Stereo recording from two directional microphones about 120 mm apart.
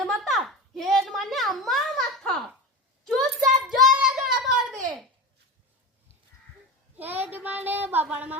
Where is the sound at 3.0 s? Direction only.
5° left (ahead or behind).